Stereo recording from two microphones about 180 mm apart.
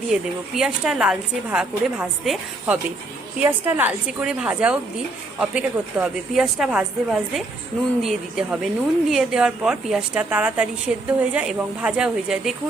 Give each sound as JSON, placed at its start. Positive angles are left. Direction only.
{"t": 0.1, "sound": "a woman's voice", "side_deg": -5}